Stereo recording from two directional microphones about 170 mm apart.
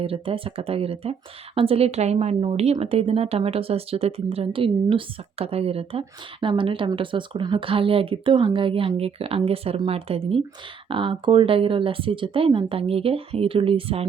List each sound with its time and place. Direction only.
0.0 s a woman's voice: 35° right (ahead or behind)